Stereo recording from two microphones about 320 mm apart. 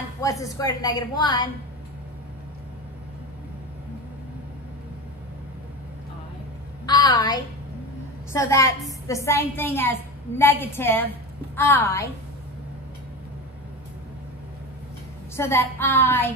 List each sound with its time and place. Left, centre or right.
0.2 s a woman's voice: centre
6.9 s a sound: centre
8.3 s a woman's voice: centre
15.3 s a woman's voice: centre